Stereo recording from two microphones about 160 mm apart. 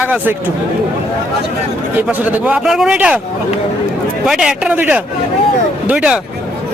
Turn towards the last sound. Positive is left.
turn(degrees=-10)  # may be behind; listen again after turning